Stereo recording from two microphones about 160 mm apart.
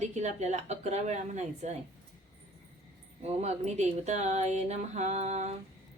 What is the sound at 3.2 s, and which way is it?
Speech, 45° right (ahead or behind).